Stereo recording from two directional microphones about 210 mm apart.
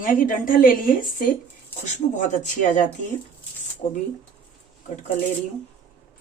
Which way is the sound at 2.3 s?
35° left (ahead or behind).